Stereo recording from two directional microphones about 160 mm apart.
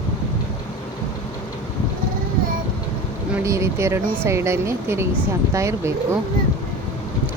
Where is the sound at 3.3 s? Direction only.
20° right (ahead or behind).